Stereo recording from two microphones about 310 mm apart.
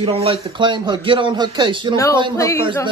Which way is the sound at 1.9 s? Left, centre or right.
Centre.